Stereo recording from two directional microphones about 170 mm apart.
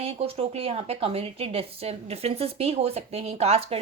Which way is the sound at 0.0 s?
35° right (ahead or behind).